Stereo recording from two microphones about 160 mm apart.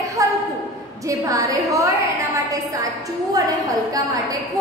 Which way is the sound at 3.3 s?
25° right (ahead or behind).